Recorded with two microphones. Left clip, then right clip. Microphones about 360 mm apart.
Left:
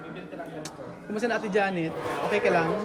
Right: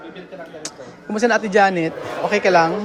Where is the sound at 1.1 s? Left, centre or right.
Centre.